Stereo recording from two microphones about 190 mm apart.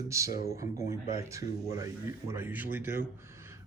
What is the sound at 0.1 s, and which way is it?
Speech, 15° right (ahead or behind).